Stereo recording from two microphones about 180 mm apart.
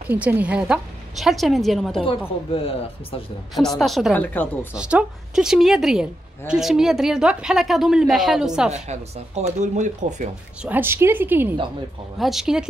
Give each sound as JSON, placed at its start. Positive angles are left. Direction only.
{"t": 0.1, "sound": "a woman's voice", "side_deg": -10}
{"t": 2.0, "sound": "speech", "side_deg": 30}
{"t": 3.5, "sound": "a woman's voice", "side_deg": 0}
{"t": 4.7, "sound": "a woman's voice", "side_deg": -5}
{"t": 8.7, "sound": "speech", "side_deg": -40}
{"t": 10.6, "sound": "a woman's voice", "side_deg": -10}